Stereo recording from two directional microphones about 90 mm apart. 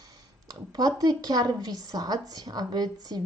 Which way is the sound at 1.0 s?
45° right (ahead or behind).